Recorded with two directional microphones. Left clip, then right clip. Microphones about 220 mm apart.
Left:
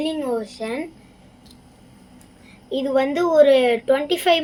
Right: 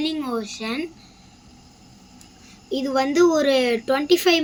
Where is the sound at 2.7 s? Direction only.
55° right (ahead or behind).